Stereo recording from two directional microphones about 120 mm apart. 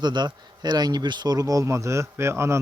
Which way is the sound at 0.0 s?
35° right (ahead or behind).